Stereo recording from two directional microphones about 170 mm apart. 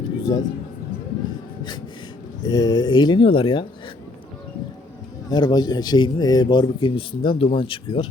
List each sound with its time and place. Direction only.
0.2 s a sound: 20° left (ahead or behind)
2.4 s speech: 20° left (ahead or behind)
5.3 s speech: 25° left (ahead or behind)